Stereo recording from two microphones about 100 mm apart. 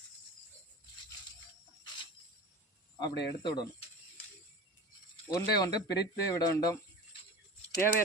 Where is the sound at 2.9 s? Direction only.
45° left (ahead or behind).